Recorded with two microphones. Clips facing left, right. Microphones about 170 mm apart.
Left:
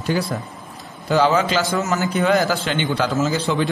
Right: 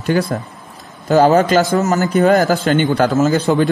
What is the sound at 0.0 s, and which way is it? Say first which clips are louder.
Speech: right 5 dB; 60° right (ahead or behind).